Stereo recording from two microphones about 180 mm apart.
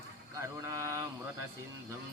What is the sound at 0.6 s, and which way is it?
Mantra, 15° right (ahead or behind).